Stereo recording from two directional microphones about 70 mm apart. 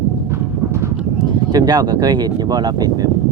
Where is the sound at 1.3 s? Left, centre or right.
Right.